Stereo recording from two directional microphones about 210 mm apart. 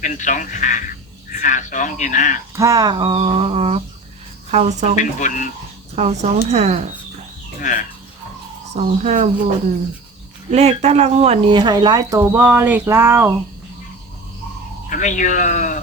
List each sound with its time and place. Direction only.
0.0 s speech: 35° left (ahead or behind)
2.6 s speech: 15° right (ahead or behind); by 4.9 s 35° right (ahead or behind)
4.9 s speech: 35° left (ahead or behind)
6.0 s speech: 30° right (ahead or behind)
7.6 s speech: 40° left (ahead or behind)
8.7 s speech: 35° right (ahead or behind)
10.5 s speech: 30° right (ahead or behind); by 13.3 s 10° right (ahead or behind)
14.8 s speech: 35° left (ahead or behind)